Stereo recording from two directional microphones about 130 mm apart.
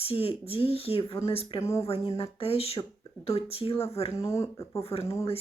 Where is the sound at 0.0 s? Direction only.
45° left (ahead or behind).